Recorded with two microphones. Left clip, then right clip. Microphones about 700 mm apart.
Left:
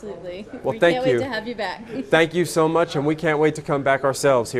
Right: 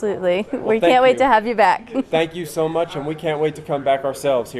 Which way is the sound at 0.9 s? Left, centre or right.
Right.